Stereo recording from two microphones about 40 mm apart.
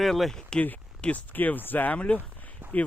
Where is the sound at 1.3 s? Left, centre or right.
Left.